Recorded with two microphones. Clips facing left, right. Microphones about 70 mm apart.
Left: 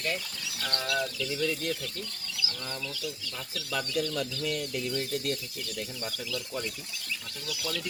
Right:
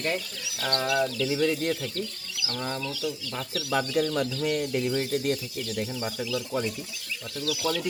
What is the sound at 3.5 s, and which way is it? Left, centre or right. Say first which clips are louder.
Speech: right 6 dB; right.